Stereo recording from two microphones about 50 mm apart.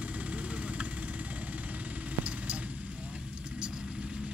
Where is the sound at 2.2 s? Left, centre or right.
Right.